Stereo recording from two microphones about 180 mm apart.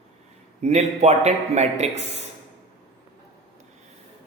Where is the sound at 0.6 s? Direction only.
40° right (ahead or behind).